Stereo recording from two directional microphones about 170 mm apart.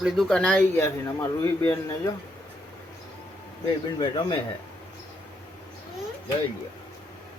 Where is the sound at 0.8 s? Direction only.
15° left (ahead or behind).